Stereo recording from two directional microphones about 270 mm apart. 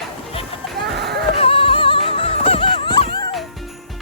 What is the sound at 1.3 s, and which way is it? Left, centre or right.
Music, left.